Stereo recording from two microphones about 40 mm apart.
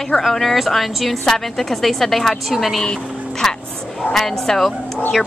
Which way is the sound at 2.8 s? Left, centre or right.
Centre.